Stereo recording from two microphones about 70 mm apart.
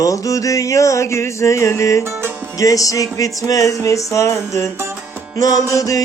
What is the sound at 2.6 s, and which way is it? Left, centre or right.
Music, left.